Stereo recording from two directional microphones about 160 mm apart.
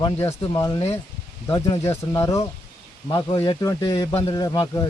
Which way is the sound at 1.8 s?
20° left (ahead or behind).